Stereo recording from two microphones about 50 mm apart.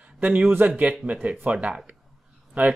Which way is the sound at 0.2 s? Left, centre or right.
Right.